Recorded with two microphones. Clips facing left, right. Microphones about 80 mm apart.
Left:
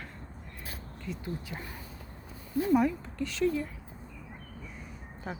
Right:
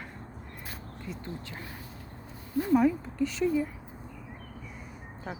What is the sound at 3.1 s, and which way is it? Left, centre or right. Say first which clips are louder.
Speech: right 2 dB; centre.